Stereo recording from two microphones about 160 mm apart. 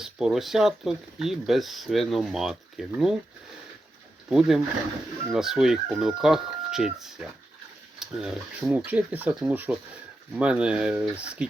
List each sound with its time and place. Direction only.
0.0 s speech: 5° right (ahead or behind)
4.3 s speech: 5° right (ahead or behind)